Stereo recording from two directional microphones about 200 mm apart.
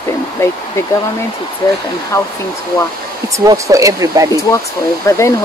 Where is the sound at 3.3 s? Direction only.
15° right (ahead or behind).